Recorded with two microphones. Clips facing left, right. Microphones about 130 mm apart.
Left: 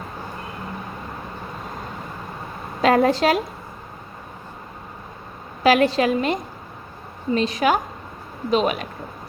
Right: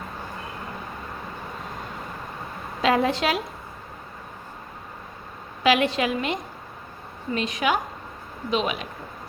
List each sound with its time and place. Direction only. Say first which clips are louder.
2.8 s a woman's voice: left 5 dB; 45° left (ahead or behind)
5.6 s a woman's voice: left 4 dB; 40° left (ahead or behind)